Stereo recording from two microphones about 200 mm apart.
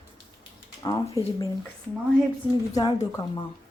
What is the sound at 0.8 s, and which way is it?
Speech, 20° left (ahead or behind).